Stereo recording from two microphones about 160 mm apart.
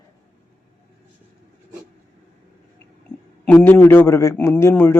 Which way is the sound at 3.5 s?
15° left (ahead or behind).